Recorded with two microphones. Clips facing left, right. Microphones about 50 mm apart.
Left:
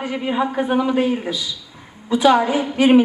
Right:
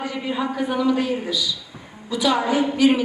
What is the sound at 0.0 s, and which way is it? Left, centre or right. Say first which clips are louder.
A woman's voice: left 4 dB; left.